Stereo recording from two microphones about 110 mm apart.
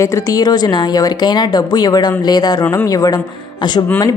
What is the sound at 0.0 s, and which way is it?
A woman's voice, 35° left (ahead or behind).